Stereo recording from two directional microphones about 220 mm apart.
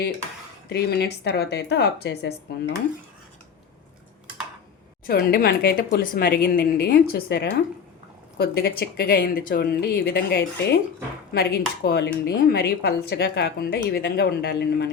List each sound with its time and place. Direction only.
0.7 s a woman's voice: 45° left (ahead or behind)
5.0 s a woman's voice: 45° left (ahead or behind)